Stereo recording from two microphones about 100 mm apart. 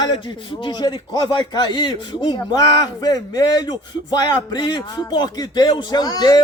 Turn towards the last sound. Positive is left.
turn(degrees=40)  # may be behind; listen again after turning